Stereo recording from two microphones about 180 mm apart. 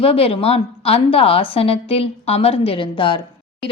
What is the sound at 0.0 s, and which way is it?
A woman's voice, 35° left (ahead or behind).